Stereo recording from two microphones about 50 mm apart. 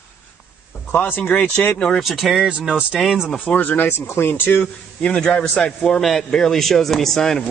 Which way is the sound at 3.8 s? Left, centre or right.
Left.